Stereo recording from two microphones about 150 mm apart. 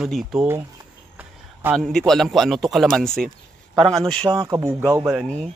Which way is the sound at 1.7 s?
Centre (ahead or behind).